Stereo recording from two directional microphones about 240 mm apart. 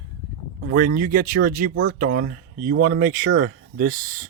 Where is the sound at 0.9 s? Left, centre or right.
Right.